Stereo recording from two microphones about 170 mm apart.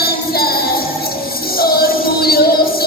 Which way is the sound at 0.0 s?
65° left (ahead or behind).